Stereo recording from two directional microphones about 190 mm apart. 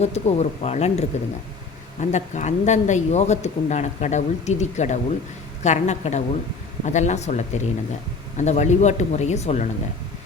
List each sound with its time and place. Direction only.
0.0 s speech: 35° left (ahead or behind)